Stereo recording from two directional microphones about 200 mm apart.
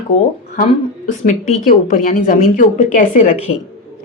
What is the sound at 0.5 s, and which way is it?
A woman's voice, 40° left (ahead or behind).